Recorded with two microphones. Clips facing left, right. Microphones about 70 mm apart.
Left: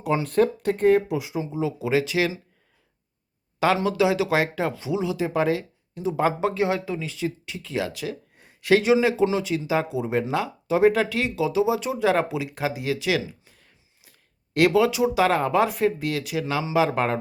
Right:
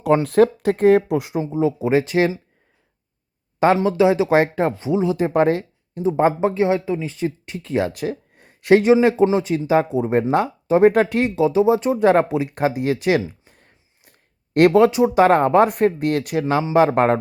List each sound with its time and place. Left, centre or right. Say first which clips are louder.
0.0 s speech: right 6 dB; right
1.4 s speech: right 8 dB; right
3.8 s speech: right 5 dB; right
7.0 s speech: right 4 dB; right